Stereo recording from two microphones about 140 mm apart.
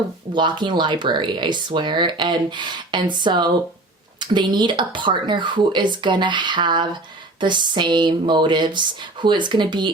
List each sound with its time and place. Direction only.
0.3 s speech: 35° right (ahead or behind)